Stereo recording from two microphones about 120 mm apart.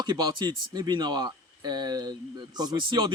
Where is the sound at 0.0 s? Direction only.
40° right (ahead or behind).